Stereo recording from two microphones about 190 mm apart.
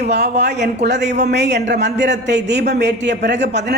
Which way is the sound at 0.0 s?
60° right (ahead or behind).